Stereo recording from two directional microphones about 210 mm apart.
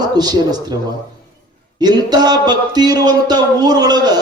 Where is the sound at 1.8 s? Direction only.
20° right (ahead or behind).